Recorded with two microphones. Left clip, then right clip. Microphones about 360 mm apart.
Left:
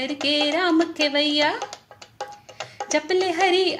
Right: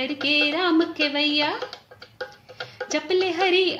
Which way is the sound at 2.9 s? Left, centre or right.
Left.